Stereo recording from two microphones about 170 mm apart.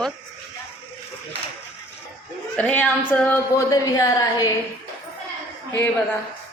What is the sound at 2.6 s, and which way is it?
A woman's voice, 10° left (ahead or behind).